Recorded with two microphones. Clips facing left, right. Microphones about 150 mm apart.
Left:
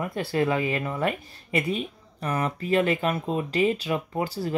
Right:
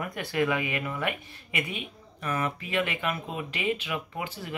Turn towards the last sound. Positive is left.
turn(degrees=35)  # may be behind; listen again after turning